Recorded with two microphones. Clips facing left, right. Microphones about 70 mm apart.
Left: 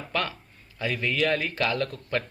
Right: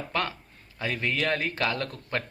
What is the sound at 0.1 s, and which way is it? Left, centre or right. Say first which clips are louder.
A man's voice: left 1 dB; right.